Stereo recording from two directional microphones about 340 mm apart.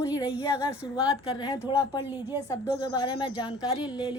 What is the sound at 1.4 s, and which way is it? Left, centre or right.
Speech, centre.